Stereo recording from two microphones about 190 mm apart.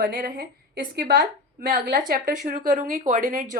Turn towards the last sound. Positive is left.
turn(degrees=-45)  # may be behind; listen again after turning